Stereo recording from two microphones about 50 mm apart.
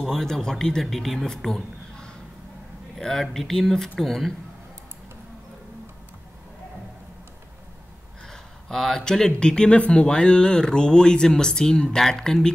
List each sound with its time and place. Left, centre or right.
0.0 s speech: centre
8.3 s a sound: centre
9.4 s speech: centre